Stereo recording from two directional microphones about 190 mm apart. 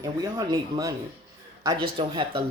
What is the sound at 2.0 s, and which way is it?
Speech, 25° right (ahead or behind).